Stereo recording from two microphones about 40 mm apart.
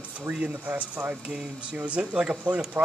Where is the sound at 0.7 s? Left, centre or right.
Right.